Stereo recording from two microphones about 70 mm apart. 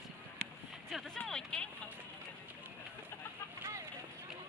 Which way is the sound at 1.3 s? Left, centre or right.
Centre.